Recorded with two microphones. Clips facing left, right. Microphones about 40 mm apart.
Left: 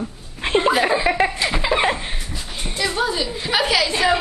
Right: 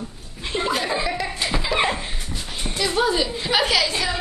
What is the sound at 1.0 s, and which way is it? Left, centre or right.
Chuckle, left.